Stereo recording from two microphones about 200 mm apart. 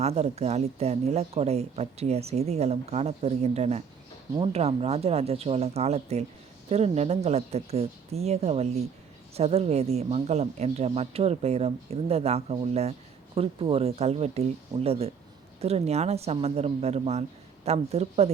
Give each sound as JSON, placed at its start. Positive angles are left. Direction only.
{"t": 0.0, "sound": "speech", "side_deg": -30}